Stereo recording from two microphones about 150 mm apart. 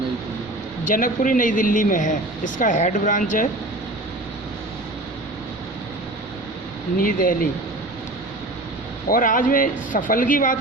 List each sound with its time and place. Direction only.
0.9 s speech: 65° left (ahead or behind)
7.0 s speech: 65° left (ahead or behind)
9.0 s speech: 65° left (ahead or behind)